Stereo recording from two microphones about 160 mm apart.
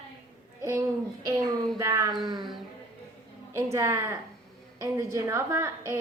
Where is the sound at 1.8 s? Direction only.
20° right (ahead or behind).